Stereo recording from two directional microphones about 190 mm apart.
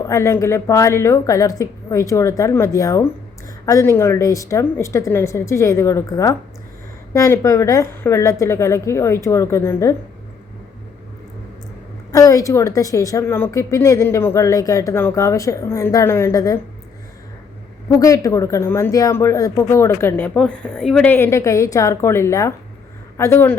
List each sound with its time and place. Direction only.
0.1 s speech: 15° left (ahead or behind)
12.1 s speech: 15° left (ahead or behind)
17.8 s speech: 15° left (ahead or behind)